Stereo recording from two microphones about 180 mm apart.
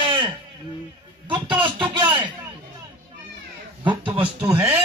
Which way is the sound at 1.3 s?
25° right (ahead or behind).